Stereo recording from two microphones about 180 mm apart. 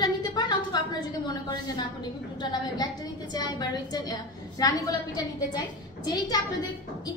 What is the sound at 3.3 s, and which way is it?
A woman's voice, 20° left (ahead or behind).